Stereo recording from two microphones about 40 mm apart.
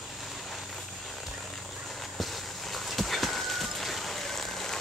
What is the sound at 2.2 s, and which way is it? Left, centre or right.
Horse, centre.